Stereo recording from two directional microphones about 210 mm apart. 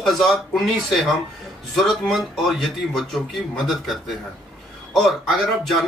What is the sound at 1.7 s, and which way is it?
Speech, centre (ahead or behind).